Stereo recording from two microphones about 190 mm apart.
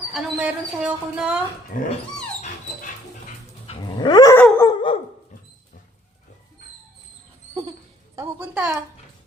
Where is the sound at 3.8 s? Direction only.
20° left (ahead or behind).